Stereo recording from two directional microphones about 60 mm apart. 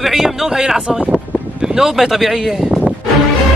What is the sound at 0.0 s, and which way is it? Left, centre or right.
A man's voice, centre.